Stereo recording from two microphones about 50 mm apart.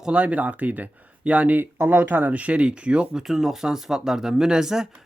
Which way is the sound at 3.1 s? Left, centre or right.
Centre.